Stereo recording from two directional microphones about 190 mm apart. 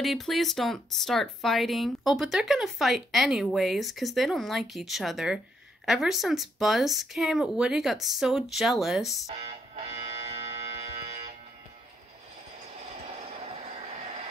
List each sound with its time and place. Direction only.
0.0 s speech: centre (ahead or behind)
9.3 s music: 30° right (ahead or behind)
13.0 s a sound: 35° right (ahead or behind)